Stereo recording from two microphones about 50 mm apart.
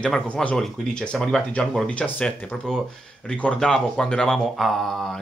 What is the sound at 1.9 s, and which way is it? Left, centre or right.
Speech, left.